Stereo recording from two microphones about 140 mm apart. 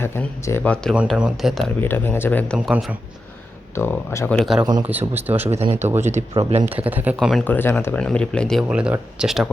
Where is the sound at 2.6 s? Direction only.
5° right (ahead or behind).